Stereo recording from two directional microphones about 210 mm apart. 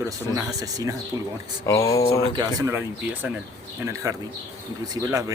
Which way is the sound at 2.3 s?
15° right (ahead or behind).